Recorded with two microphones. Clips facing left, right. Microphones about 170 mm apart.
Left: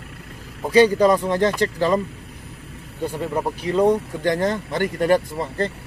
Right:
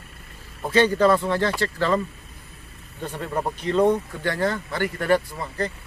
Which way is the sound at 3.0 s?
10° left (ahead or behind).